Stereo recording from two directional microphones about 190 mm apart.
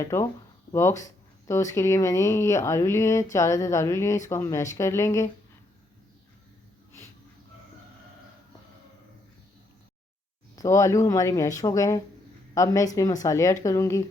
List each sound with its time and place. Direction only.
0.0 s speech: 15° left (ahead or behind)
10.5 s speech: 15° left (ahead or behind)